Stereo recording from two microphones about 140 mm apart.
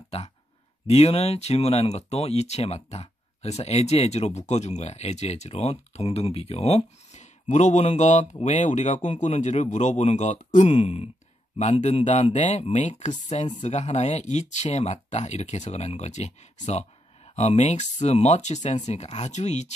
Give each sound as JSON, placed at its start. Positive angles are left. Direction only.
{"t": 0.8, "sound": "speech", "side_deg": 45}